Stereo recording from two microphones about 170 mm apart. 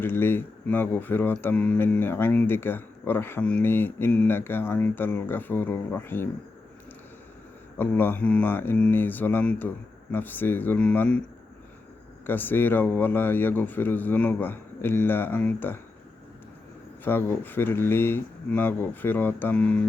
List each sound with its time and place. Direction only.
0.0 s speech: 15° left (ahead or behind)
7.8 s speech: 10° left (ahead or behind)
12.2 s speech: 10° left (ahead or behind)
17.0 s speech: 10° left (ahead or behind)